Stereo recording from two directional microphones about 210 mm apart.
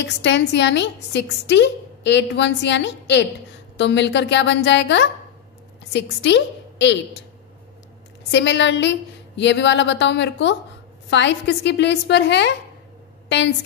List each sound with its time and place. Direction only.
0.0 s a woman's voice: 55° left (ahead or behind)